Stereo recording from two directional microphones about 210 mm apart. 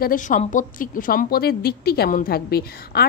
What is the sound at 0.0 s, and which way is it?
A woman's voice, 40° left (ahead or behind).